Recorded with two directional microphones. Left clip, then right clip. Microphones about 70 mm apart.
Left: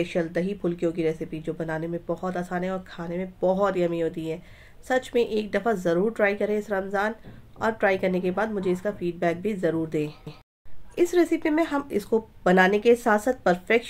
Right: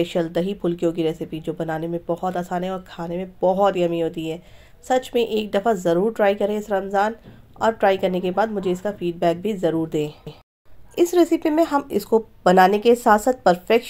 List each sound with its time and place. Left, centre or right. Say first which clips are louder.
0.0 s speech: right 4 dB; right